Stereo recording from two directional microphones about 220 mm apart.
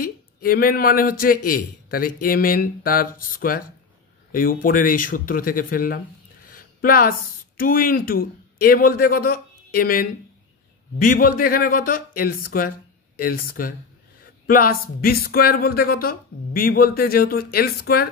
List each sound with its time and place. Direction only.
0.0 s a man's voice: 40° left (ahead or behind)